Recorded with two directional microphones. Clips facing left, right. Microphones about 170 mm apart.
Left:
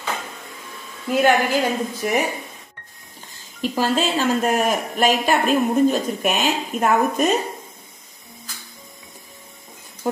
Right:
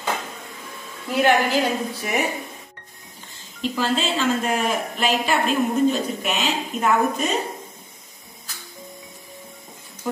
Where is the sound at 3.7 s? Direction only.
40° left (ahead or behind).